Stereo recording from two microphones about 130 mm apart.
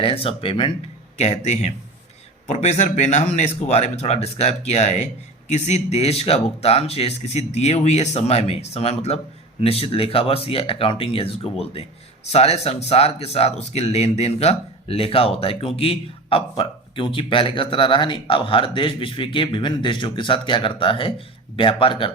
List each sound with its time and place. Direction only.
0.0 s speech: 45° left (ahead or behind)
1.2 s speech: 55° left (ahead or behind)